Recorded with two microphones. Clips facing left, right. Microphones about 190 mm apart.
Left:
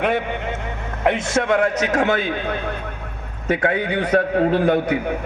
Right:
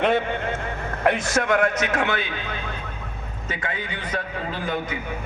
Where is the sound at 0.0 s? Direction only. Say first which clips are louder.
Even; 15° left (ahead or behind).